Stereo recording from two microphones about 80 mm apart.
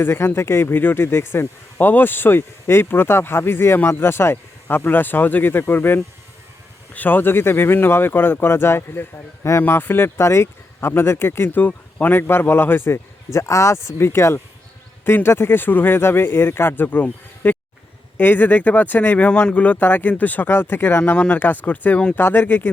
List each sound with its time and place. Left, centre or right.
0.0 s speech: left